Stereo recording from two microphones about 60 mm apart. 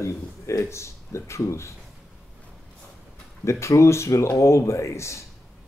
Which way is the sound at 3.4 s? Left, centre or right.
Left.